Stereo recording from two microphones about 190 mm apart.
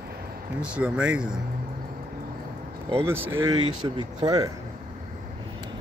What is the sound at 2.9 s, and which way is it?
Speech, 10° right (ahead or behind).